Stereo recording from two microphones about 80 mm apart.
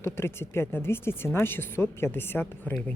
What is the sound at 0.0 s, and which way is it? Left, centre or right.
Speech, left.